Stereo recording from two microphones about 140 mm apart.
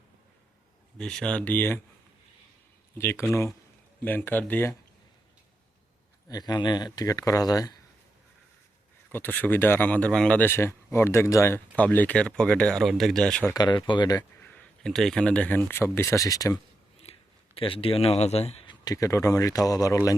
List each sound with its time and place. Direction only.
0.9 s speech: 5° left (ahead or behind)
3.0 s speech: 20° left (ahead or behind)
6.2 s speech: 30° left (ahead or behind)
9.1 s speech: 15° left (ahead or behind)
13.5 s speech: 30° left (ahead or behind)
14.4 s speech: 10° left (ahead or behind); by 16.6 s 25° left (ahead or behind)
17.0 s a sound: 45° left (ahead or behind)
18.7 s speech: 25° left (ahead or behind)